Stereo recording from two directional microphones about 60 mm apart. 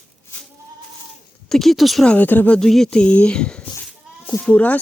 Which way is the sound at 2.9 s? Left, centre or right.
Centre.